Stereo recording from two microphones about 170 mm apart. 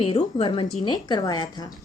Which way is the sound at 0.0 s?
35° left (ahead or behind).